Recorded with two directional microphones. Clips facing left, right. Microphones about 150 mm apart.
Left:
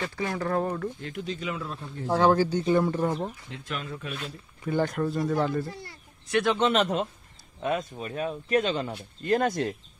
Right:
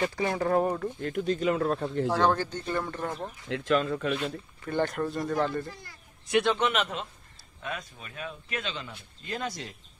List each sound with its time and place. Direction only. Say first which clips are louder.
0.0 s speech: right 3 dB; 15° right (ahead or behind)
1.0 s speech: right 6 dB; 50° right (ahead or behind); by 2.0 s 65° right (ahead or behind)
2.0 s speech: left 5 dB; 10° left (ahead or behind)
3.4 s speech: right 10 dB; 90° right
4.6 s speech: left 2 dB; 5° left (ahead or behind)
5.7 s speech: left 4 dB; 30° left (ahead or behind); by 9.8 s 50° left (ahead or behind)